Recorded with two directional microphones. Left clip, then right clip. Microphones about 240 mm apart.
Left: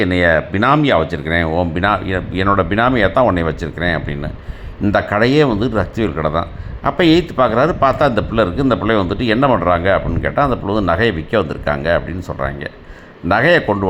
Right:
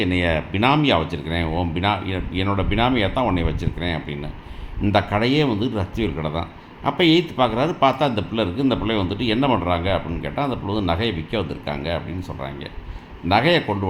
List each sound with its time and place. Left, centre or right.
0.0 s speech: left